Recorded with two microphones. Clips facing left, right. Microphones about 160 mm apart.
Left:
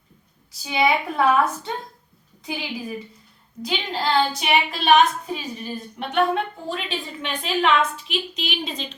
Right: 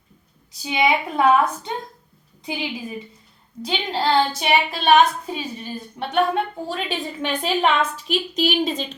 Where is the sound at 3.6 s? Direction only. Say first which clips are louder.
Right 3 dB; 30° right (ahead or behind).